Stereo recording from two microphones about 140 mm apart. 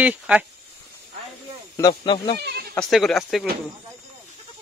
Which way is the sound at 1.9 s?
35° left (ahead or behind).